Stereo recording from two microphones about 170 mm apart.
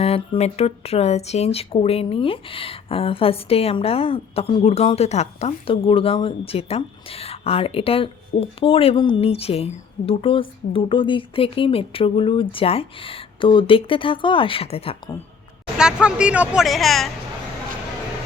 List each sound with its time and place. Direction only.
0.0 s speech: 40° left (ahead or behind)
15.8 s speech: 5° right (ahead or behind)